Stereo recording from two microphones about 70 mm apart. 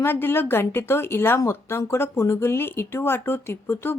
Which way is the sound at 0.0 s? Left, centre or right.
Left.